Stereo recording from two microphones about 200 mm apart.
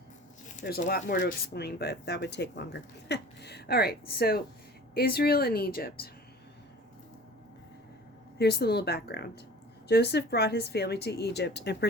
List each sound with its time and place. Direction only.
0.4 s speech: 40° left (ahead or behind)
8.4 s speech: 55° left (ahead or behind)